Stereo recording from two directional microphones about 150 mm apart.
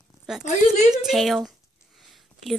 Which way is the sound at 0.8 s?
Centre (ahead or behind).